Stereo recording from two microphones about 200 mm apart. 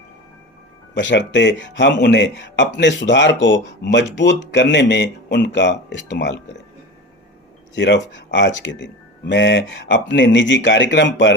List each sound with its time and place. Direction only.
0.9 s speech: 65° left (ahead or behind)
7.8 s speech: 65° left (ahead or behind)